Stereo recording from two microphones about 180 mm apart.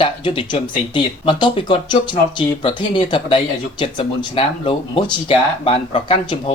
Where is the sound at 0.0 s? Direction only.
30° left (ahead or behind).